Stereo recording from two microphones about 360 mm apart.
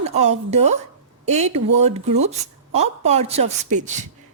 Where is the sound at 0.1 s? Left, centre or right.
Centre.